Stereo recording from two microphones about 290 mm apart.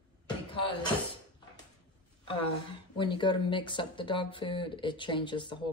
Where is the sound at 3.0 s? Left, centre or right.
Centre.